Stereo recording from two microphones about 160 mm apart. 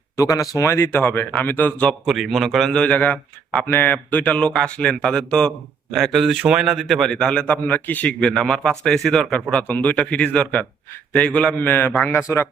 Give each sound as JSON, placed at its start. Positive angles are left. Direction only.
{"t": 0.2, "sound": "a man's voice", "side_deg": 20}